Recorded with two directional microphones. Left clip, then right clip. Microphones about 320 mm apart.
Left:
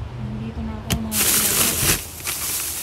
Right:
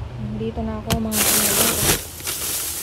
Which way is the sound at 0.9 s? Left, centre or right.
Centre.